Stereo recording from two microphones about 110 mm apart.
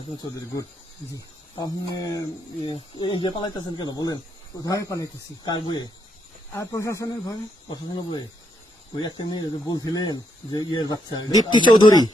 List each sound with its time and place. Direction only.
1.1 s speech: 35° left (ahead or behind)
5.5 s speech: 45° left (ahead or behind)
6.5 s speech: 30° left (ahead or behind)